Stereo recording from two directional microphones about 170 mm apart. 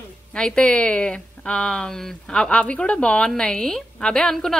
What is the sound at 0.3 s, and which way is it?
Speech, 5° left (ahead or behind).